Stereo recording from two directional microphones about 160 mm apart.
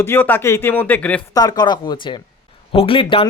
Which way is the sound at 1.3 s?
25° left (ahead or behind).